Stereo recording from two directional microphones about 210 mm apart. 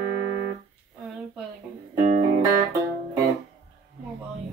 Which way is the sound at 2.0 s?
35° right (ahead or behind).